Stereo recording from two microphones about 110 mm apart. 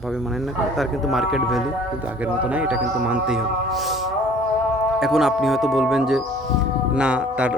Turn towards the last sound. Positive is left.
turn(degrees=-10)  # may be behind; listen again after turning